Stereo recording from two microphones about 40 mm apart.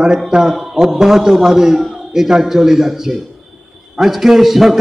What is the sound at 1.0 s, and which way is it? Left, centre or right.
A man's voice, centre.